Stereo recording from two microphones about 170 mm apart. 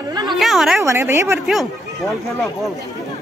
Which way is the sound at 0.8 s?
15° right (ahead or behind).